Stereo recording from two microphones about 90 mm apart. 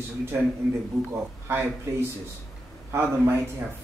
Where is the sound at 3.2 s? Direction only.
30° right (ahead or behind).